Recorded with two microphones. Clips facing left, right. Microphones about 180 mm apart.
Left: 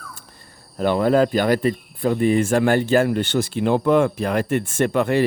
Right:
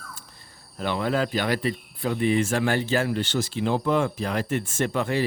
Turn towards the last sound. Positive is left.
turn(degrees=60)  # may be behind; listen again after turning